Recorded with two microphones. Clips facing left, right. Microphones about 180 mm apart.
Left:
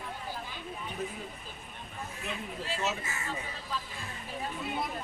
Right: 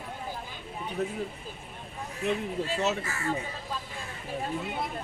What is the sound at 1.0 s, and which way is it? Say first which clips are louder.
Speech: right 6 dB; 70° right (ahead or behind).